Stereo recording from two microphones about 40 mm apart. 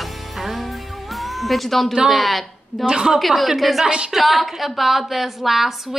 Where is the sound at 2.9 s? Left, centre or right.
Centre.